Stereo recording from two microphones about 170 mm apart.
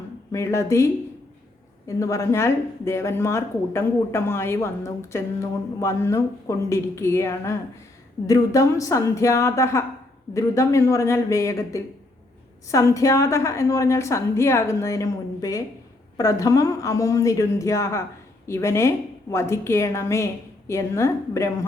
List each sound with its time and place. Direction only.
0.3 s speech: 15° left (ahead or behind)
2.0 s a woman's voice: 20° left (ahead or behind)